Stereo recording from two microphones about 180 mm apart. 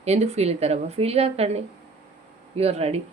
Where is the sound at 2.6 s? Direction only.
35° right (ahead or behind).